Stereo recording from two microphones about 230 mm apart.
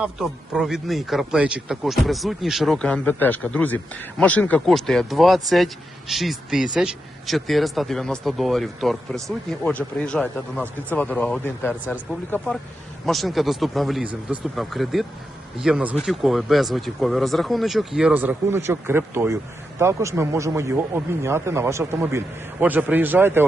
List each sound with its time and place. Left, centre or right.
0.0 s speech: centre